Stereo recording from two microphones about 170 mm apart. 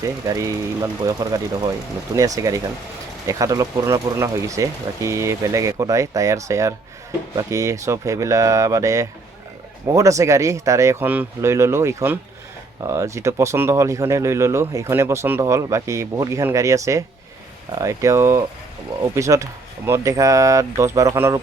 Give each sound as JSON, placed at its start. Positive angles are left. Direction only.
{"t": 0.0, "sound": "speech", "side_deg": -20}